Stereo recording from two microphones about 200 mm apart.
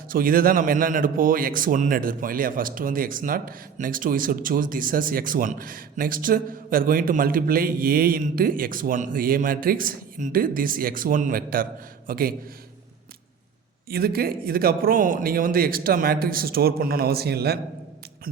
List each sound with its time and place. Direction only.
0.1 s a man's voice: 45° right (ahead or behind)
13.9 s a man's voice: 50° right (ahead or behind)